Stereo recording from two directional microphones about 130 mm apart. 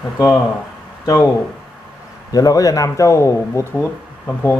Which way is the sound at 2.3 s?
25° left (ahead or behind).